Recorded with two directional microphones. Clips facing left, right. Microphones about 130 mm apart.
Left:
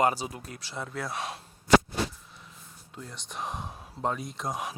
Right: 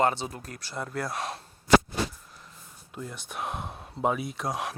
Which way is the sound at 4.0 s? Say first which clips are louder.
Right 3 dB; 5° right (ahead or behind).